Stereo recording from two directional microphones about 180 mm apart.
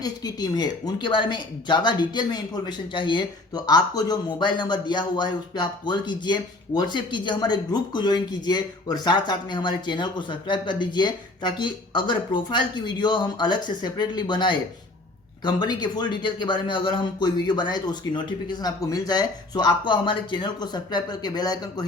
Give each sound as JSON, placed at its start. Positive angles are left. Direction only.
{"t": 0.0, "sound": "speech", "side_deg": 20}